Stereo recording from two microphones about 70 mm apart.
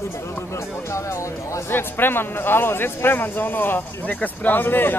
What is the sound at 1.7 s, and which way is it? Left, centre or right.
Speech, left.